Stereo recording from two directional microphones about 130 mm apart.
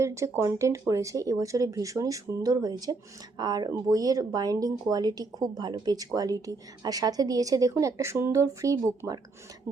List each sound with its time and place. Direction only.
0.0 s a woman's voice: 20° right (ahead or behind)